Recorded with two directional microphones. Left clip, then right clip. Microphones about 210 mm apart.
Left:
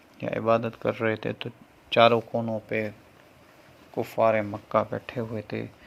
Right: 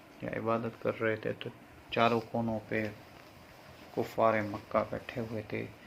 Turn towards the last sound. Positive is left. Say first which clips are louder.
# left 5 dB
turn(degrees=50)  # may be behind; listen again after turning